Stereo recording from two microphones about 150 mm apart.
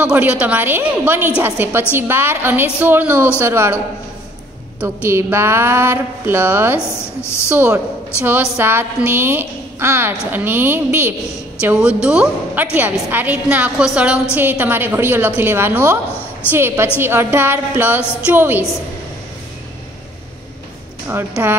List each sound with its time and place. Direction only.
0.0 s a woman's voice: 10° right (ahead or behind)
7.2 s speech: 15° left (ahead or behind)
7.4 s a woman's voice: 15° right (ahead or behind)
21.1 s a woman's voice: 15° right (ahead or behind)